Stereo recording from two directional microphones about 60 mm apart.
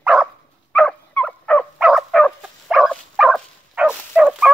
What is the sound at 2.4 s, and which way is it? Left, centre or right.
Dog, centre.